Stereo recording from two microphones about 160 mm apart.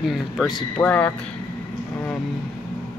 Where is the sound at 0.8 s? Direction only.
10° left (ahead or behind).